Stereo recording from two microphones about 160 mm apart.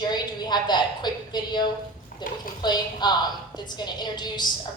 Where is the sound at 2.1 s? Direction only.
60° left (ahead or behind).